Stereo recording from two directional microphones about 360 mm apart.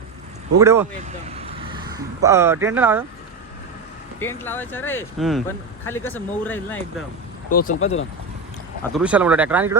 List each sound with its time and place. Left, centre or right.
0.6 s speech: centre
4.2 s speech: centre
7.5 s speech: left
8.8 s speech: centre